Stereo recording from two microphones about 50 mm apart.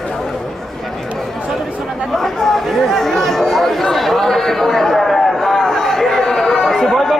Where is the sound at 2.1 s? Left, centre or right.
Centre.